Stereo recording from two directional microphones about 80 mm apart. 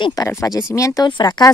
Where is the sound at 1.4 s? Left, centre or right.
Left.